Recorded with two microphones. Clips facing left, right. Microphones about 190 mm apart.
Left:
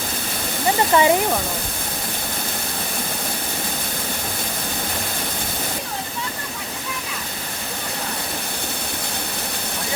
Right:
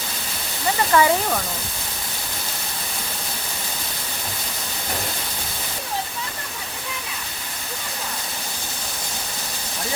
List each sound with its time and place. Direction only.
0.9 s speech: 20° left (ahead or behind)